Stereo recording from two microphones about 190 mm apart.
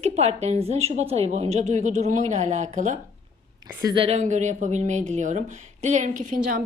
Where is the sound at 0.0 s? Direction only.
35° right (ahead or behind).